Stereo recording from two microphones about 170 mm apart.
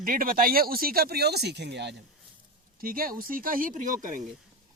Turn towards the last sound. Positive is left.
turn(degrees=-50)  # may be behind; listen again after turning